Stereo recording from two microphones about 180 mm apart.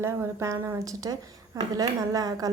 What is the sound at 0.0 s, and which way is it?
A woman's voice, 15° right (ahead or behind).